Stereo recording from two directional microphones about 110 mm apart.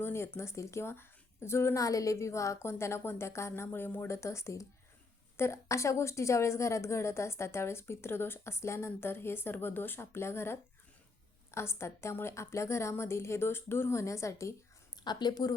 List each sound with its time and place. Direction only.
0.0 s a sound: 20° left (ahead or behind)
0.3 s a woman's voice: 25° left (ahead or behind)
15.0 s speech: 40° left (ahead or behind)